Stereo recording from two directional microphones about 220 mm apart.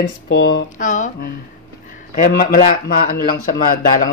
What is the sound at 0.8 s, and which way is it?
Speech, 35° left (ahead or behind).